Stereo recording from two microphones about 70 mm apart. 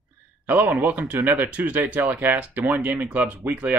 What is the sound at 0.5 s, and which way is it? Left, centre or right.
Speech, right.